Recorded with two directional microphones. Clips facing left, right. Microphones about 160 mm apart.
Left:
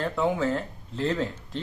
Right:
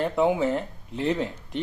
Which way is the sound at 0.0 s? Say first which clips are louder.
Right 3 dB; 15° right (ahead or behind).